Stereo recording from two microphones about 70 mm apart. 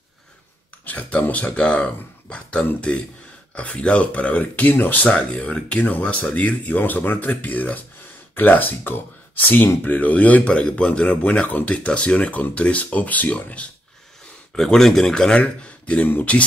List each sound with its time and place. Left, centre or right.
0.8 s speech: left
14.5 s speech: centre; by 16.4 s left